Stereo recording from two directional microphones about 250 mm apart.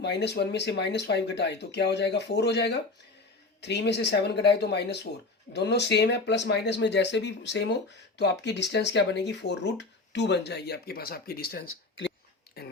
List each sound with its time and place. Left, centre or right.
0.0 s speech: left
11.6 s speech: left
12.6 s a sound: left